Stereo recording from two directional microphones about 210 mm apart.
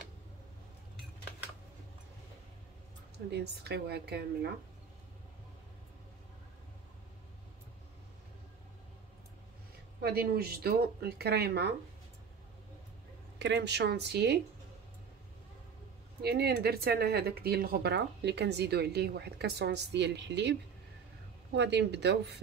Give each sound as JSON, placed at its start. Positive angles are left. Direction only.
{"t": 3.3, "sound": "speech", "side_deg": -50}
{"t": 10.0, "sound": "speech", "side_deg": -50}
{"t": 13.4, "sound": "speech", "side_deg": -55}
{"t": 16.2, "sound": "speech", "side_deg": -50}
{"t": 21.5, "sound": "speech", "side_deg": -55}